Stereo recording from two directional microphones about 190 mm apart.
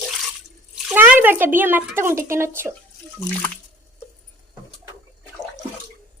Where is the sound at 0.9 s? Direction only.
10° right (ahead or behind).